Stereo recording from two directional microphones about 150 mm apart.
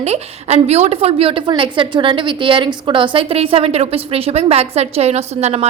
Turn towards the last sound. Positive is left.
turn(degrees=-45)  # may be behind; listen again after turning